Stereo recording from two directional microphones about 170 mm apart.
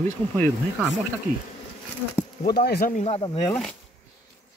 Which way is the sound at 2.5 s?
65° left (ahead or behind).